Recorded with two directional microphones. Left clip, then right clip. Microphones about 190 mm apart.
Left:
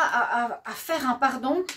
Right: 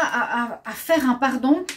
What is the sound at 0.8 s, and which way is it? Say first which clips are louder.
Speech: right 4 dB; 45° left (ahead or behind).